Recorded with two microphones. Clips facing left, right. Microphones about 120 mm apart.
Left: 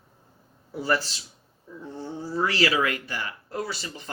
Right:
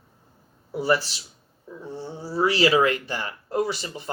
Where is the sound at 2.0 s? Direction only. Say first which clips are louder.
Right 3 dB; 10° right (ahead or behind).